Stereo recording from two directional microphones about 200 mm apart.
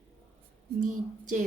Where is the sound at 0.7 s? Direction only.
40° right (ahead or behind).